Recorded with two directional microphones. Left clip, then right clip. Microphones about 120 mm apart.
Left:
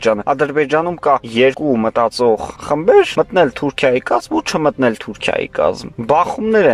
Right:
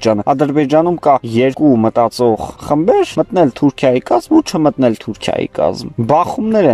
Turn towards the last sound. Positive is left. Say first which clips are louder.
# even
turn(degrees=-35)  # may be behind; listen again after turning